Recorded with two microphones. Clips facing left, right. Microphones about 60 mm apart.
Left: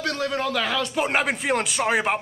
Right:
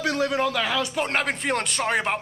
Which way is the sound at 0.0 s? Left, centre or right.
Centre.